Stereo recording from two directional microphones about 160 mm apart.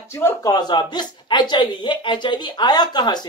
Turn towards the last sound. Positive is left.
turn(degrees=25)  # may be behind; listen again after turning